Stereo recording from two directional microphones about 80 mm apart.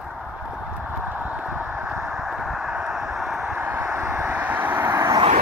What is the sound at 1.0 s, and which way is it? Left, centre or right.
Horse, right.